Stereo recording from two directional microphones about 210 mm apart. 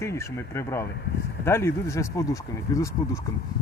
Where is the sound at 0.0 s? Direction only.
15° left (ahead or behind).